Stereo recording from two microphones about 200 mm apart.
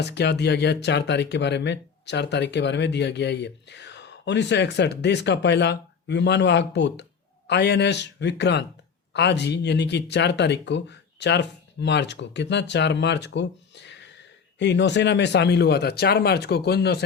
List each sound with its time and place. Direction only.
0.0 s speech: 60° left (ahead or behind)